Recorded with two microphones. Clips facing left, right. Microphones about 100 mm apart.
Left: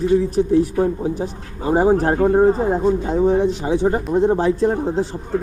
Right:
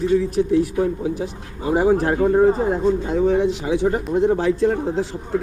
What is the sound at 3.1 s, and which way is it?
Speech, 30° left (ahead or behind).